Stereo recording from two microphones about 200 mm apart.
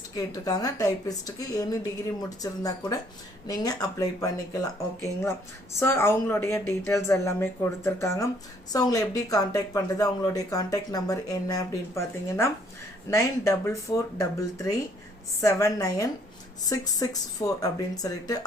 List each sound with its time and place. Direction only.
0.2 s speech: 20° left (ahead or behind)
13.7 s speech: 15° left (ahead or behind)